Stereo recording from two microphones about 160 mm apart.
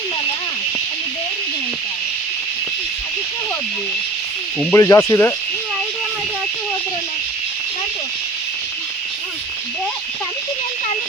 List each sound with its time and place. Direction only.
4.6 s speech: 15° left (ahead or behind)